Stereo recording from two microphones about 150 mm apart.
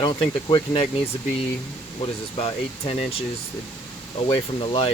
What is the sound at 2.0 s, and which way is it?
Speech, 40° left (ahead or behind).